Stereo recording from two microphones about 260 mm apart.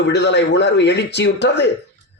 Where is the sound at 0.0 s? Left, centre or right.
Left.